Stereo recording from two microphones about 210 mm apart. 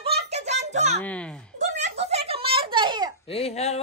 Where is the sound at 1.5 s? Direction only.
35° right (ahead or behind).